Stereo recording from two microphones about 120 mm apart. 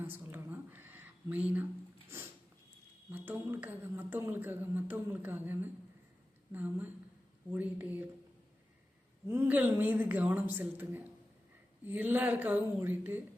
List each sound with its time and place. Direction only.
0.0 s a sound: 15° right (ahead or behind)
3.1 s a woman's voice: 15° right (ahead or behind)
9.2 s a woman's voice: 20° right (ahead or behind)